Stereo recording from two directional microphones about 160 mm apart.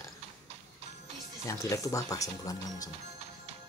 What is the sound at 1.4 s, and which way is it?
Speech, 20° left (ahead or behind).